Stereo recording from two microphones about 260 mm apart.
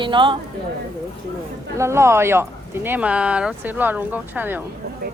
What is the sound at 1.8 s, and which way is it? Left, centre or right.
Speech, centre.